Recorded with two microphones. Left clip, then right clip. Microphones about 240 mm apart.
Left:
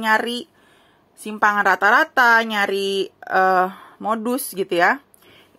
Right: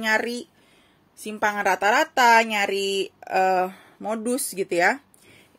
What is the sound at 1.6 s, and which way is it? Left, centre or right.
Speech, left.